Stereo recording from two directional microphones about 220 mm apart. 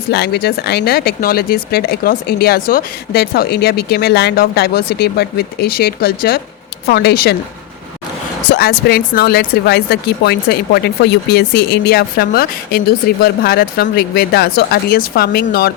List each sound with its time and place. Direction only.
0.1 s speech: 45° left (ahead or behind)
8.4 s speech: 45° left (ahead or behind)